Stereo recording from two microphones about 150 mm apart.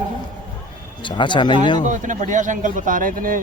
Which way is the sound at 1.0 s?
30° left (ahead or behind).